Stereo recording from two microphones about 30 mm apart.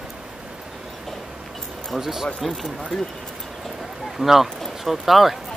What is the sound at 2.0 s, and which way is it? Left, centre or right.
Speech, centre.